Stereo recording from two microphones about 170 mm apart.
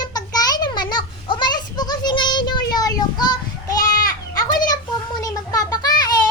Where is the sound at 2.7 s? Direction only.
20° left (ahead or behind).